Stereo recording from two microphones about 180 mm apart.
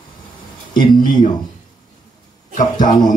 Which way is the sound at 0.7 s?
25° left (ahead or behind).